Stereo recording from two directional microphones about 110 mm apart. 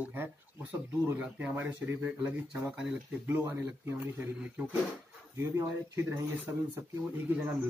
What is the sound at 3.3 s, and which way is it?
Speech, 20° right (ahead or behind).